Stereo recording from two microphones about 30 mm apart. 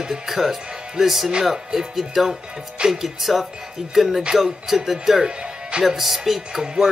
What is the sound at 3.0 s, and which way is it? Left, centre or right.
Speech, centre.